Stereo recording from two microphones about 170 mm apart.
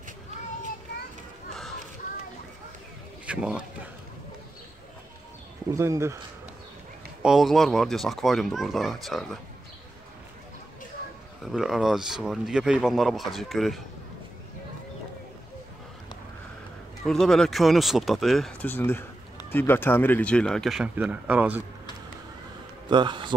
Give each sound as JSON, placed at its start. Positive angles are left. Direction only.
{"t": 3.3, "sound": "speech", "side_deg": -5}
{"t": 5.7, "sound": "speech", "side_deg": -15}
{"t": 7.2, "sound": "speech", "side_deg": 0}
{"t": 11.4, "sound": "speech", "side_deg": 0}
{"t": 17.0, "sound": "speech", "side_deg": 0}
{"t": 18.7, "sound": "speech", "side_deg": 15}
{"t": 22.8, "sound": "a man's voice", "side_deg": -25}